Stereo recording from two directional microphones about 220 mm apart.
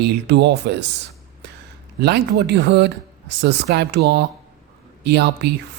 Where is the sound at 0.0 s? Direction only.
50° right (ahead or behind).